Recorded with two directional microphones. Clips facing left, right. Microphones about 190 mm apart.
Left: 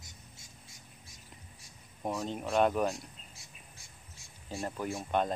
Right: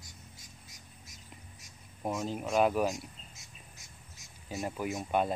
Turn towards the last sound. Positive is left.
turn(degrees=-5)  # may be behind; listen again after turning